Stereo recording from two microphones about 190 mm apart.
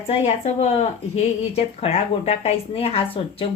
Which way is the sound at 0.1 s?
35° left (ahead or behind).